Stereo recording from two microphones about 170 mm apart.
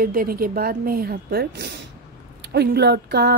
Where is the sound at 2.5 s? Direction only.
70° right (ahead or behind).